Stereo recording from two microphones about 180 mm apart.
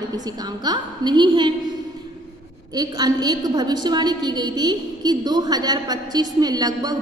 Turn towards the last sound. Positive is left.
turn(degrees=-20)  # may be behind; listen again after turning